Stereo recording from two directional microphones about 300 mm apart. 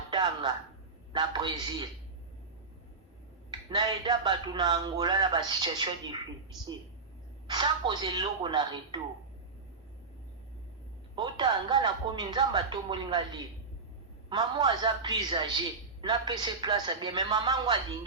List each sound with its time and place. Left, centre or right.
0.1 s a sound: centre
1.1 s speech: centre
3.7 s speech: centre
7.4 s speech: centre
11.1 s speech: centre
14.3 s speech: centre